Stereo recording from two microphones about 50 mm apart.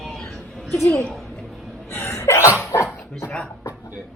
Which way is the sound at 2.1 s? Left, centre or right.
Left.